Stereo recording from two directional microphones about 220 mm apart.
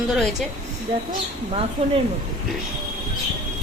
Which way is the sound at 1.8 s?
25° right (ahead or behind).